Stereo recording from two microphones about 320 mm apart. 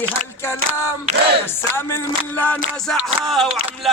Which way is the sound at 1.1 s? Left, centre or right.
Right.